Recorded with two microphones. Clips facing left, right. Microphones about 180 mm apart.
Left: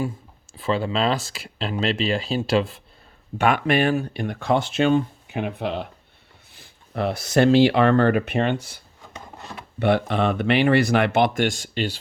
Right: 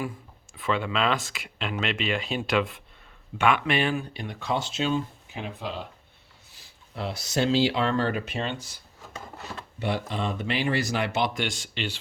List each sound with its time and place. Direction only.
0.5 s speech: 35° left (ahead or behind)
3.3 s speech: 40° left (ahead or behind); by 8.8 s 60° left (ahead or behind)
9.8 s speech: 65° left (ahead or behind); by 11.9 s 40° left (ahead or behind)